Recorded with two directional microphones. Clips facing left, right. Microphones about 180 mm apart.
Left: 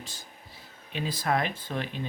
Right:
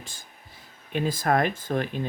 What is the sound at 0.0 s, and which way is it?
Speech, 50° right (ahead or behind).